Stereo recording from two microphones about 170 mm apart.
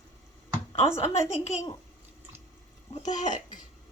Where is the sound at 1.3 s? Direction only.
40° left (ahead or behind).